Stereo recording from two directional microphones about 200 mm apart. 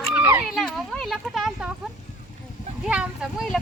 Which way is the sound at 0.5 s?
Centre (ahead or behind).